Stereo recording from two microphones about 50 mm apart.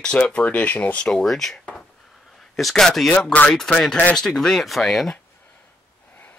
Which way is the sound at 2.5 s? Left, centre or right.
Centre.